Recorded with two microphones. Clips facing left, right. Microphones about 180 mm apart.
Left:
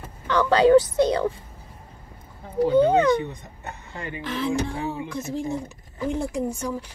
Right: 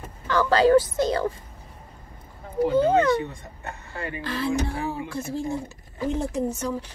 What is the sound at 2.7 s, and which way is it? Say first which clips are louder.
Speech: left 2 dB; 15° left (ahead or behind).